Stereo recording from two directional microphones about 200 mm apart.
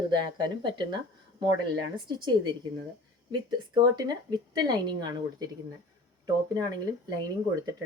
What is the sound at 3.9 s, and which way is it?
Speech, 20° right (ahead or behind).